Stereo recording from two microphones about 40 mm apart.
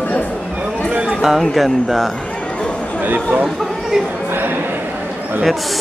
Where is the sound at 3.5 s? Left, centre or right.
Centre.